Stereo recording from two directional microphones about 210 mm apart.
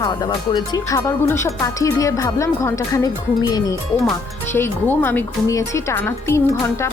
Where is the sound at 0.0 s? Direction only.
20° left (ahead or behind).